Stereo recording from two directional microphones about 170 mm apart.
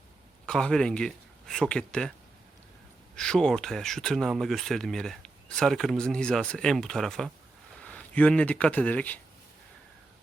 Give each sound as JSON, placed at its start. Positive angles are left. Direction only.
{"t": 0.4, "sound": "speech", "side_deg": 5}
{"t": 3.2, "sound": "speech", "side_deg": 5}